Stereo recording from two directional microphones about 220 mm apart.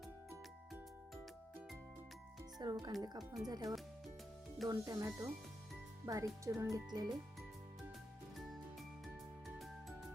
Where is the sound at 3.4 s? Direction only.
15° right (ahead or behind).